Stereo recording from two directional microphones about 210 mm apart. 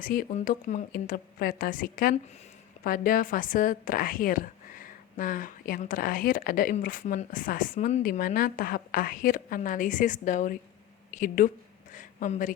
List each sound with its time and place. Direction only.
0.0 s a woman's voice: 40° left (ahead or behind)